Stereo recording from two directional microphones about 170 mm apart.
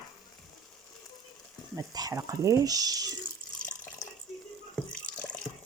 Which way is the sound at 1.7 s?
20° right (ahead or behind).